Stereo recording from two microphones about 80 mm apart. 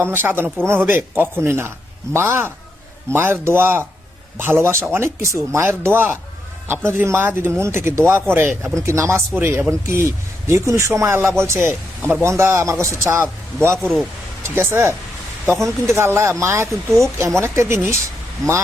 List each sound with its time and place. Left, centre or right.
0.0 s a man's voice: right